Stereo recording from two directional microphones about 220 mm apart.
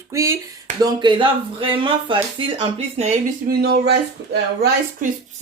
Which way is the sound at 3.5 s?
45° right (ahead or behind).